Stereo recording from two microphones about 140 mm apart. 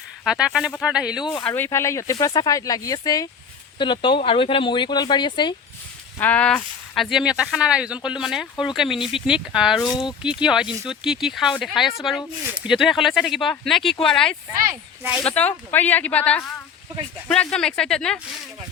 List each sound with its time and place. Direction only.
0.3 s speech: 5° right (ahead or behind)
1.2 s speech: 35° left (ahead or behind)
1.5 s speech: 15° left (ahead or behind); by 5.5 s 30° left (ahead or behind)
6.1 s speech: 10° left (ahead or behind)